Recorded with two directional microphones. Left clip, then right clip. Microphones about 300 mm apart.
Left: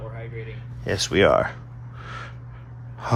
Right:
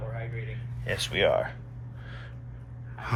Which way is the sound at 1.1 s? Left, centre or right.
Left.